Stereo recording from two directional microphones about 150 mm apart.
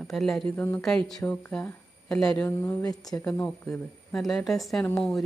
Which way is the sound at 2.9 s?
25° left (ahead or behind).